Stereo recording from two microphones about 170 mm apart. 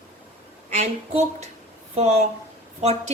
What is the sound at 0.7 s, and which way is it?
Speech, 40° right (ahead or behind).